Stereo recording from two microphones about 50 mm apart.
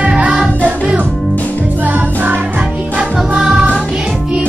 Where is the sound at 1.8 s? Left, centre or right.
Right.